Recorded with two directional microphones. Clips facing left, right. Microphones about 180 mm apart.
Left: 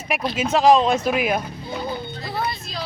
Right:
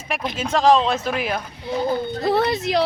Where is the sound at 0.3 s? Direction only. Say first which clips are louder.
Left 1 dB; 10° left (ahead or behind).